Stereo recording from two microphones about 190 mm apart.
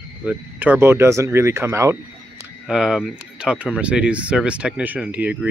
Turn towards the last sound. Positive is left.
turn(degrees=-10)  # may be behind; listen again after turning